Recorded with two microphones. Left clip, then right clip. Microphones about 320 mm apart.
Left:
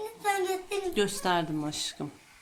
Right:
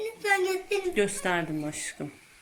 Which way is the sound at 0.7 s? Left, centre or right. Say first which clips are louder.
Right 2 dB; centre.